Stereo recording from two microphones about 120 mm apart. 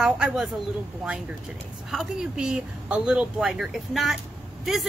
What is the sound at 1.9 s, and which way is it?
Speech, 5° right (ahead or behind).